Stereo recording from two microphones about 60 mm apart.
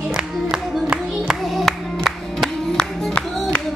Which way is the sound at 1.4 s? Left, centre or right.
Centre.